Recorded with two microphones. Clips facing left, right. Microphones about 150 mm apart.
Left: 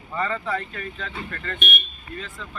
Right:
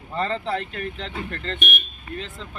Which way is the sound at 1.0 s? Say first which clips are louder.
Right 2 dB; 25° right (ahead or behind).